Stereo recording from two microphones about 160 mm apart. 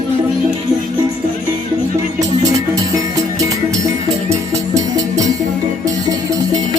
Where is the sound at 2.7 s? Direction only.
20° right (ahead or behind).